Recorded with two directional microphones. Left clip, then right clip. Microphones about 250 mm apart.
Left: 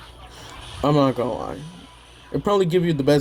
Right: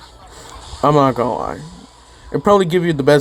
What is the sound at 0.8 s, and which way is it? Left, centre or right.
Speech, right.